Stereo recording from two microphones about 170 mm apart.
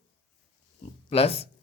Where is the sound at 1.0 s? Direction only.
35° left (ahead or behind).